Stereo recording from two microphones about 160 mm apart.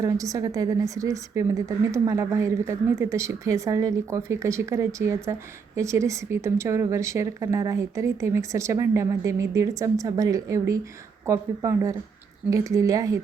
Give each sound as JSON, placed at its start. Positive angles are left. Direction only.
{"t": 0.0, "sound": "a woman's voice", "side_deg": -20}